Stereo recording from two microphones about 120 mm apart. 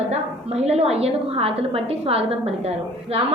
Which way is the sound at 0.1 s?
60° right (ahead or behind).